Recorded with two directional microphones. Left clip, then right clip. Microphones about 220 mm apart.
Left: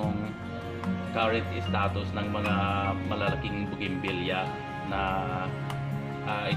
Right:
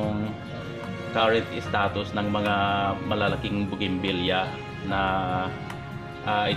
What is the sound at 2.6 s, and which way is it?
Music, 25° right (ahead or behind).